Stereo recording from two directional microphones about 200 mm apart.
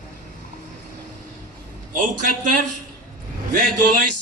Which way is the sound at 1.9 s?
40° right (ahead or behind).